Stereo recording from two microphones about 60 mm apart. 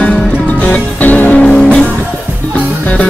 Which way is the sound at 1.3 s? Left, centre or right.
Centre.